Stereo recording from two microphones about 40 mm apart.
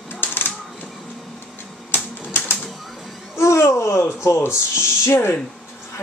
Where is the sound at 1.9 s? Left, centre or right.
Left.